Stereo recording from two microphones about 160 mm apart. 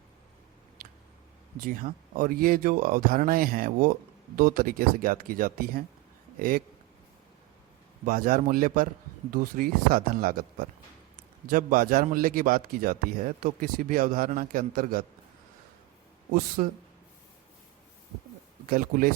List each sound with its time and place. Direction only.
1.5 s a man's voice: 60° right (ahead or behind)
8.0 s a man's voice: 60° right (ahead or behind)
16.6 s a man's voice: 55° right (ahead or behind)
18.7 s a man's voice: 65° right (ahead or behind)